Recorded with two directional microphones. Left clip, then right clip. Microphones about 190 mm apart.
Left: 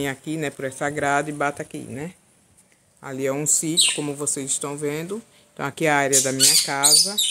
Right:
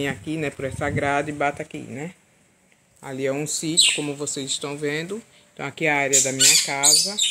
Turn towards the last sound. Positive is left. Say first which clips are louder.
# left 1 dB
turn(degrees=10)  # may be behind; listen again after turning